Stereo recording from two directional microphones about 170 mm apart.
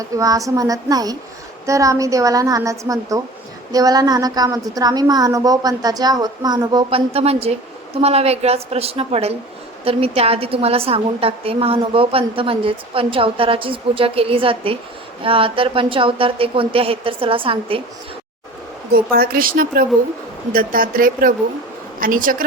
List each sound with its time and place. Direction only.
0.0 s a woman's voice: 20° right (ahead or behind)
19.1 s speech: 60° right (ahead or behind)